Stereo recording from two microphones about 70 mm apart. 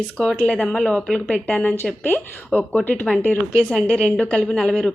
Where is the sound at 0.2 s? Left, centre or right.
Centre.